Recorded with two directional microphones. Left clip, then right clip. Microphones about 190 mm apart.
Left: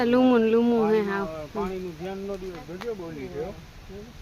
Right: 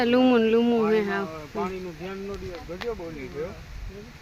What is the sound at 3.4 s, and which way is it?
Speech, 55° left (ahead or behind).